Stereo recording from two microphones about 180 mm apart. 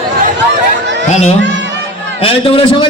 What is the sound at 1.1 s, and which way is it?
A man's voice, 40° left (ahead or behind).